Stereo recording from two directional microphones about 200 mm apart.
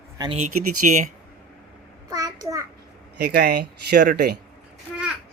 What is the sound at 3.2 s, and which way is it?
Speech, 55° right (ahead or behind).